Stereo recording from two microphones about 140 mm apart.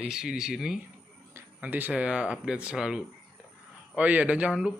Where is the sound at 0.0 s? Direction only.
5° right (ahead or behind).